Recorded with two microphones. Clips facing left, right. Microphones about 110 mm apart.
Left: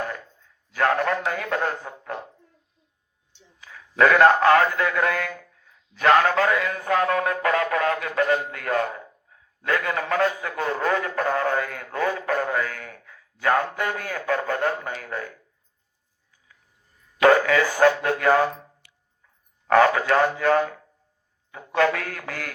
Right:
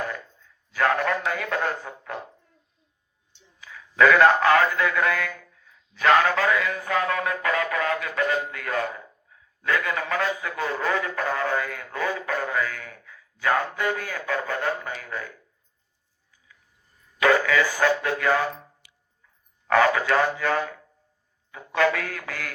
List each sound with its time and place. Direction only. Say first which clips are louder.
0.7 s a man's voice: left 1 dB; 40° left (ahead or behind)
3.6 s a man's voice: even; 35° left (ahead or behind)
5.9 s mantra: left 1 dB; 40° left (ahead or behind)
9.6 s a man's voice: left 1 dB; 40° left (ahead or behind)
17.2 s a man's voice: left 3 dB; 40° left (ahead or behind)
18.8 s dog: even; 15° right (ahead or behind)
19.6 s mantra: left 2 dB; 35° left (ahead or behind)